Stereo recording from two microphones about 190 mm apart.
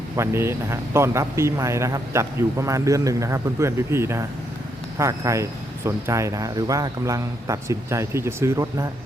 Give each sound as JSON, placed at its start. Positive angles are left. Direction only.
{"t": 0.2, "sound": "speech", "side_deg": -15}